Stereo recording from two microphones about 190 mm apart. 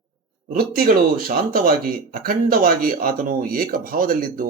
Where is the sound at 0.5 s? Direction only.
50° right (ahead or behind).